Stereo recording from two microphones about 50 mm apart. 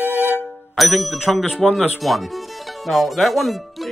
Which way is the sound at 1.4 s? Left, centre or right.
Centre.